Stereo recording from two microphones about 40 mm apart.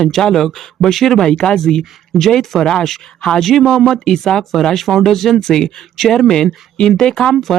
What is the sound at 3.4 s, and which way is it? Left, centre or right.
Speech, centre.